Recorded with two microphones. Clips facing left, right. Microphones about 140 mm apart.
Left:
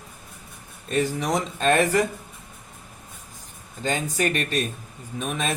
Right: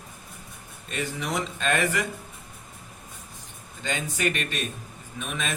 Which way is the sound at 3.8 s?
40° left (ahead or behind).